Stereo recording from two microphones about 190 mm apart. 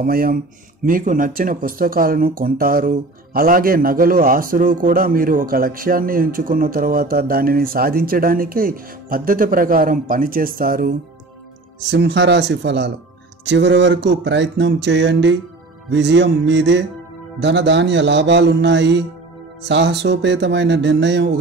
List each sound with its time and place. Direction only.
0.0 s speech: 50° right (ahead or behind)
11.9 s speech: 65° right (ahead or behind)
13.5 s a sound: 65° right (ahead or behind)